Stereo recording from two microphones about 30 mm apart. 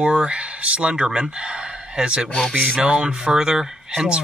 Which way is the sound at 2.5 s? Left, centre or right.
Right.